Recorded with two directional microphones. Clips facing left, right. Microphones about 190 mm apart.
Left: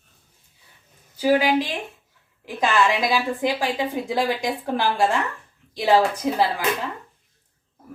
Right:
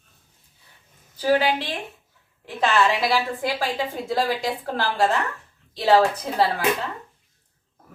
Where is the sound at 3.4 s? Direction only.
15° left (ahead or behind).